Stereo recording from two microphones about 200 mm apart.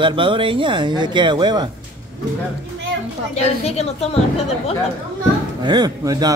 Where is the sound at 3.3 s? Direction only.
30° left (ahead or behind).